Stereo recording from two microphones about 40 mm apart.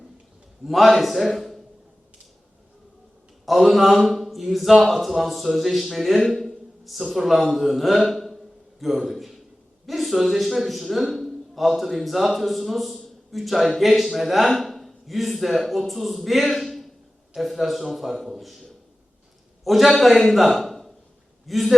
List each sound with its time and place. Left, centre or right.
0.6 s a man's voice: centre
3.4 s a man's voice: centre